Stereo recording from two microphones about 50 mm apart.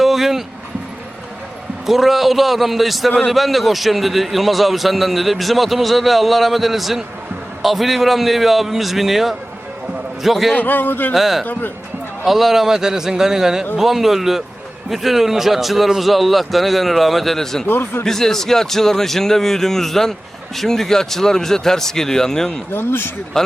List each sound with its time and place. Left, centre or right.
0.0 s a sound: centre
1.9 s a man's voice: centre
10.5 s a man's voice: left
11.1 s a man's voice: centre
17.7 s a man's voice: left
18.0 s a man's voice: centre
22.7 s a man's voice: left